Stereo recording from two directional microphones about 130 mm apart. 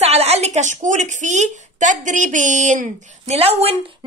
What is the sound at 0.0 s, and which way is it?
A woman's voice, 55° right (ahead or behind).